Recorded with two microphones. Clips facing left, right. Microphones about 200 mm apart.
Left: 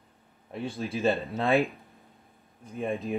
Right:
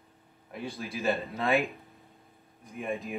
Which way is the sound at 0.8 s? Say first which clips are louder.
Left 4 dB; 30° left (ahead or behind).